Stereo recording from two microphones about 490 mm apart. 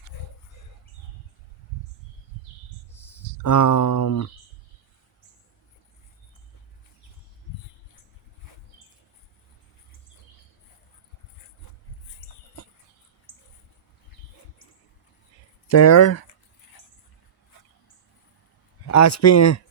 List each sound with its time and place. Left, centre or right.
3.4 s speech: left
15.6 s speech: left
18.9 s speech: left